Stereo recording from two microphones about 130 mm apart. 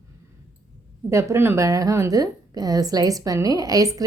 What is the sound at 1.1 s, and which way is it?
A woman's voice, 20° right (ahead or behind).